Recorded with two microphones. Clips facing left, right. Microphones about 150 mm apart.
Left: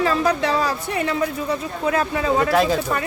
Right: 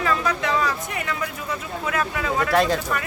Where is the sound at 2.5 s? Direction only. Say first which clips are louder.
Right 1 dB; centre (ahead or behind).